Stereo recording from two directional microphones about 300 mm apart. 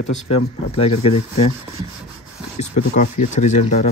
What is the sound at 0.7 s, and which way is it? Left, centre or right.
Speech, centre.